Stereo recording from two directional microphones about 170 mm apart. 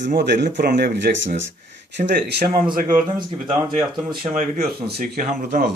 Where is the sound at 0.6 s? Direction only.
65° right (ahead or behind).